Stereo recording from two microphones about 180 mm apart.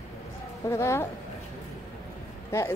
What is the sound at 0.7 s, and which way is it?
Speech, 15° left (ahead or behind).